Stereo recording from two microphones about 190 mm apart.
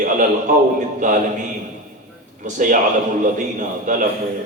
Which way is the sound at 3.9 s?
45° right (ahead or behind).